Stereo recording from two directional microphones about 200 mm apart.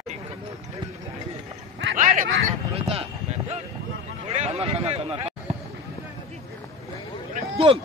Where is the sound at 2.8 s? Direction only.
30° right (ahead or behind).